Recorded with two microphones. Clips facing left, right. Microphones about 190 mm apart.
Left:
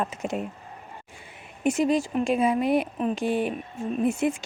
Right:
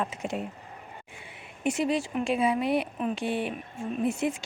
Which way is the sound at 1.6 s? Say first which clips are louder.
Left 4 dB; 45° left (ahead or behind).